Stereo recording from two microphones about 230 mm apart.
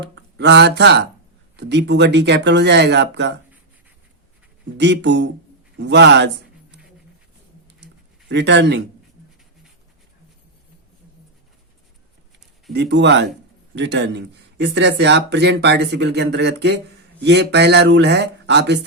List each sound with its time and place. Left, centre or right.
0.0 s speech: right
4.8 s speech: right
8.3 s speech: right
12.7 s speech: right